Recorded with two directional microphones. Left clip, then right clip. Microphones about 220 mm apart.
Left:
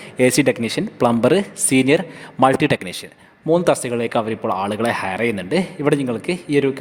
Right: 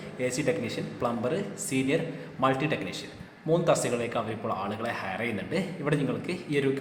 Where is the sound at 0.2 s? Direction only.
45° left (ahead or behind).